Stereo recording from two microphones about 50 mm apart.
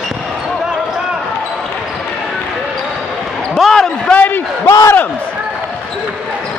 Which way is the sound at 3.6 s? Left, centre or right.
Centre.